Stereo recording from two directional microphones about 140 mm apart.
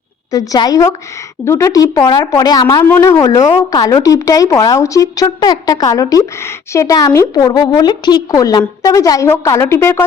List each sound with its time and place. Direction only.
0.3 s speech: 25° left (ahead or behind)
2.8 s speech: 15° left (ahead or behind)